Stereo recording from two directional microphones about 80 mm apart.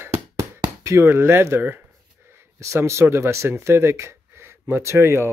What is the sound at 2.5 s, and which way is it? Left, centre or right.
Speech, right.